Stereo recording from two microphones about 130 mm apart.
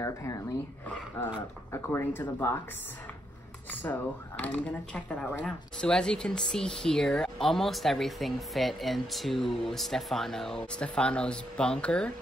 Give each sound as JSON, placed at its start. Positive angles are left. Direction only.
{"t": 0.0, "sound": "speech", "side_deg": 25}
{"t": 3.8, "sound": "speech", "side_deg": 15}